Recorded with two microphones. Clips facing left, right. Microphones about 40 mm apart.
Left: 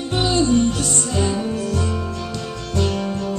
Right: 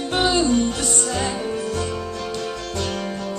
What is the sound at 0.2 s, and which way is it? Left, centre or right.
Music, right.